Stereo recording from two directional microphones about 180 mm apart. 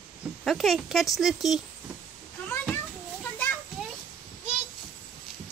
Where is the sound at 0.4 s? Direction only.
Centre (ahead or behind).